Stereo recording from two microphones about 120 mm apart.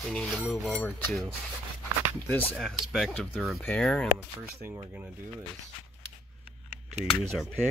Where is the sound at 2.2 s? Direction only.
15° left (ahead or behind).